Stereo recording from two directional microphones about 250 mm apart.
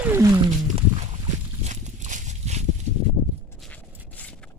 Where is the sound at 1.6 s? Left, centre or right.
Right.